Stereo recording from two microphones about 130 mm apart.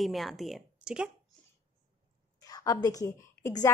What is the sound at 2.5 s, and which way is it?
A woman's voice, 30° left (ahead or behind).